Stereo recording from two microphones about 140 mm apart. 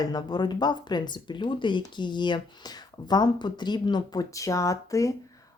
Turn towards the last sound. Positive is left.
turn(degrees=25)  # may be behind; listen again after turning